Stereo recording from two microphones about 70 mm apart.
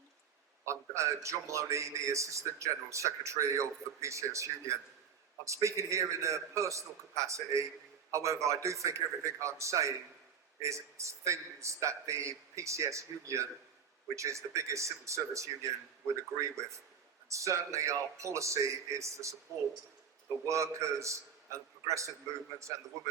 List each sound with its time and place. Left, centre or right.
0.6 s a man's voice: right
17.2 s a man's voice: right
20.5 s a man's voice: right